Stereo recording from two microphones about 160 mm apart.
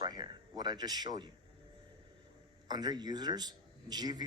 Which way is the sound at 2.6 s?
25° right (ahead or behind).